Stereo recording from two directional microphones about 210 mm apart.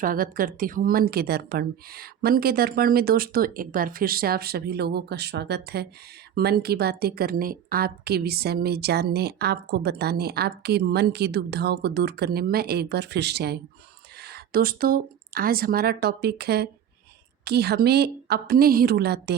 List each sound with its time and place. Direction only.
0.0 s a woman's voice: 40° right (ahead or behind)